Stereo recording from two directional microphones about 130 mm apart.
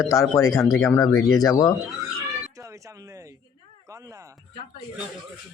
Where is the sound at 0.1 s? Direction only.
25° left (ahead or behind).